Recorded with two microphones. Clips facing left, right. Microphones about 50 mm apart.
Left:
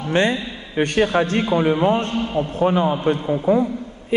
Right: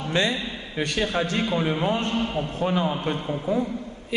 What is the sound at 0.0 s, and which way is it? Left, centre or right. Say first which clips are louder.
A man's voice: left 5 dB; left.